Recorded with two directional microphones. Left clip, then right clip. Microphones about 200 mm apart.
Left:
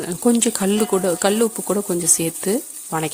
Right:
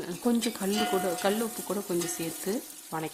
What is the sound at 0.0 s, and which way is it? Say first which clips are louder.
Speech: left 11 dB; 35° left (ahead or behind).